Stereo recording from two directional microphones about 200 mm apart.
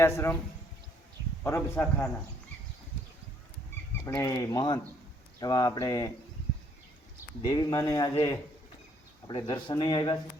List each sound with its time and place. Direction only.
0.0 s a man's voice: 15° left (ahead or behind)
1.5 s a man's voice: 10° left (ahead or behind)
4.0 s speech: 15° left (ahead or behind)
7.4 s speech: 20° left (ahead or behind)